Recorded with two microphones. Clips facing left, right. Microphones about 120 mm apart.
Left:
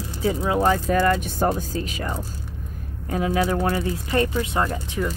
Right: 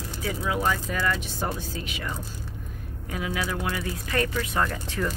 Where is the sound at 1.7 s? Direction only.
35° left (ahead or behind).